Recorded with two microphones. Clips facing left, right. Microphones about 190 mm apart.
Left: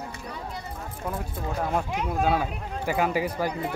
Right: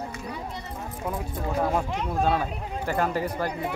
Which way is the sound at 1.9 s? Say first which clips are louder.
Even; 5° left (ahead or behind).